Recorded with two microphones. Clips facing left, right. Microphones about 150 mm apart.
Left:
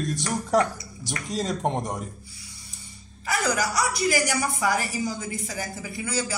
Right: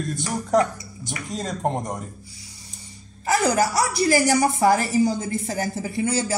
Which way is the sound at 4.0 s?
30° right (ahead or behind).